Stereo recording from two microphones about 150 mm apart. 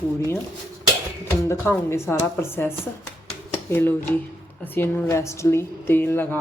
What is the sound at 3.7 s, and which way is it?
A woman's voice, 15° left (ahead or behind).